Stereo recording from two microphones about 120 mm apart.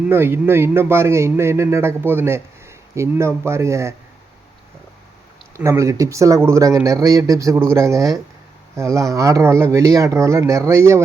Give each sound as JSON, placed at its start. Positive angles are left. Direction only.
{"t": 0.1, "sound": "a man's voice", "side_deg": -20}
{"t": 5.5, "sound": "a man's voice", "side_deg": -25}